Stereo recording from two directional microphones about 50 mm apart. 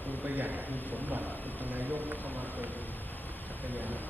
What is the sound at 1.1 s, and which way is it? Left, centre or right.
Speech, right.